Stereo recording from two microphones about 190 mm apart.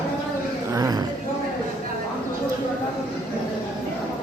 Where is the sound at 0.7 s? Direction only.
20° right (ahead or behind).